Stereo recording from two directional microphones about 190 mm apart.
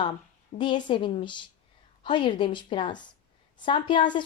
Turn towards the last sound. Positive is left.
turn(degrees=25)  # may be behind; listen again after turning